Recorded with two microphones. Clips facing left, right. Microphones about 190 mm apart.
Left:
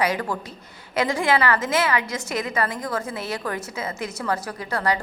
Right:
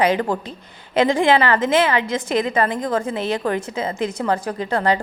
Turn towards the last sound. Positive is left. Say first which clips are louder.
# right 5 dB
turn(degrees=-30)  # may be behind; listen again after turning